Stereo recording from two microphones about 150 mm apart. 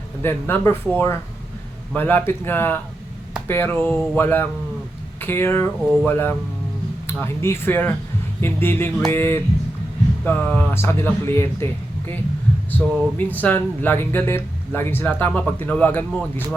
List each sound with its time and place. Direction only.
0.2 s speech: 15° left (ahead or behind)
12.7 s speech: 10° left (ahead or behind)